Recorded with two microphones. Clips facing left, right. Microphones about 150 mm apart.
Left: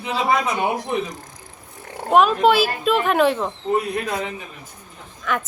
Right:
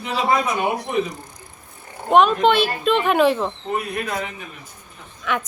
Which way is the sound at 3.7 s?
25° left (ahead or behind).